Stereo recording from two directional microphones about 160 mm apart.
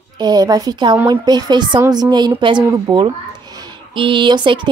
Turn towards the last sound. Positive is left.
turn(degrees=-30)  # may be behind; listen again after turning